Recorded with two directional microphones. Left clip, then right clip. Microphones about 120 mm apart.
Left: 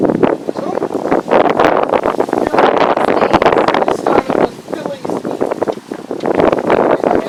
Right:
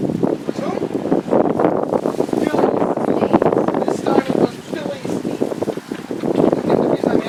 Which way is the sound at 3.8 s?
45° left (ahead or behind).